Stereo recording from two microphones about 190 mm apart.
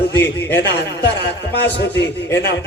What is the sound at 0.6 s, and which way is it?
A man's voice, 65° left (ahead or behind).